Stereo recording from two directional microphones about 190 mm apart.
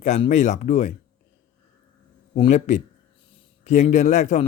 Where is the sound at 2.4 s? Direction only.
35° left (ahead or behind).